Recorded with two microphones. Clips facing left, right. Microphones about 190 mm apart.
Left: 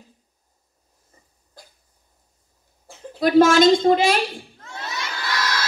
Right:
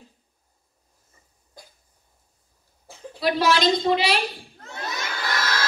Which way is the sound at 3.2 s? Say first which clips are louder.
Left 7 dB; 45° left (ahead or behind).